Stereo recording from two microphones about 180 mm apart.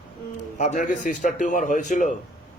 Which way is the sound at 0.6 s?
40° left (ahead or behind).